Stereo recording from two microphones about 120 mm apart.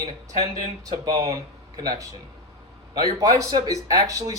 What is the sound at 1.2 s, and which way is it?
Speech, 30° right (ahead or behind).